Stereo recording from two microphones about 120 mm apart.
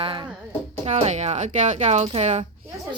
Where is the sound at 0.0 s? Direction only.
45° right (ahead or behind).